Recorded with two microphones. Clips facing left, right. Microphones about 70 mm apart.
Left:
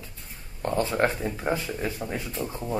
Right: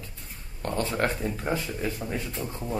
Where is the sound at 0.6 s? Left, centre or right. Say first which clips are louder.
Left 3 dB; centre.